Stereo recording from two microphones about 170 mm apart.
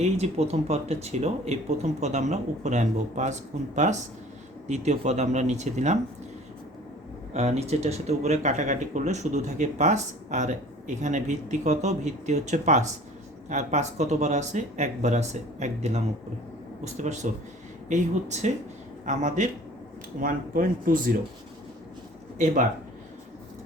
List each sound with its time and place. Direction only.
0.0 s speech: 40° right (ahead or behind)
4.7 s speech: 40° right (ahead or behind)
7.3 s speech: 40° right (ahead or behind)